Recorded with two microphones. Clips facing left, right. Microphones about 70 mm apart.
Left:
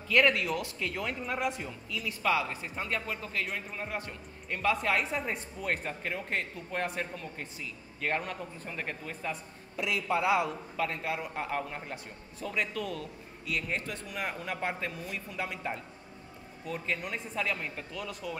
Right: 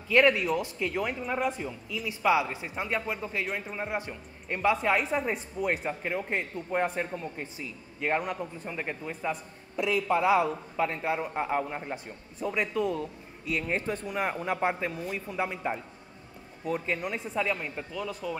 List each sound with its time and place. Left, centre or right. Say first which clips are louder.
0.1 s a man's voice: right 3 dB; centre
4.7 s a man's voice: right 4 dB; centre
9.8 s a man's voice: right 4 dB; right
14.6 s a man's voice: right 5 dB; centre
17.0 s speech: right 4 dB; centre